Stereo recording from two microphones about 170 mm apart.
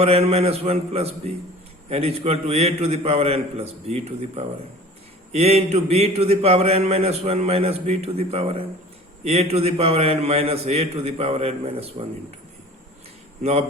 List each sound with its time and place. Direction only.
0.0 s a man's voice: 35° right (ahead or behind)
13.4 s a man's voice: 40° right (ahead or behind)